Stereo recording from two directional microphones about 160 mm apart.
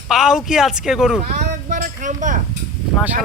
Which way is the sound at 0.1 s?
5° right (ahead or behind).